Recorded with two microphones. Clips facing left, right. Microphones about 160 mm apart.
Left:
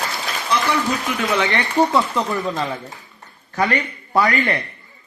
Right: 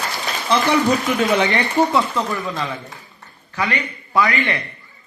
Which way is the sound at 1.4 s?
20° right (ahead or behind).